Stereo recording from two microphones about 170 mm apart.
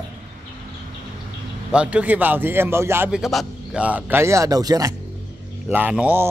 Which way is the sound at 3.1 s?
Centre (ahead or behind).